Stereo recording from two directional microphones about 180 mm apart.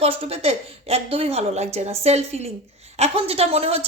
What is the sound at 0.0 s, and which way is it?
Speech, 35° right (ahead or behind).